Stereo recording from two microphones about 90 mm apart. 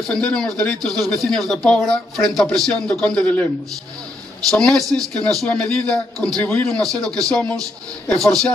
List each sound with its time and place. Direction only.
0.0 s speech: 10° left (ahead or behind)
4.5 s speech: 5° left (ahead or behind)
6.4 s speech: 20° left (ahead or behind)
6.7 s speech: 5° left (ahead or behind)